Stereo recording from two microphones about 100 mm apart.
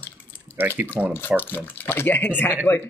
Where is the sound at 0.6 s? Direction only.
20° right (ahead or behind).